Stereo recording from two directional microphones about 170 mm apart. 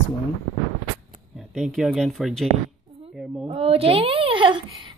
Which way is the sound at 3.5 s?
35° right (ahead or behind).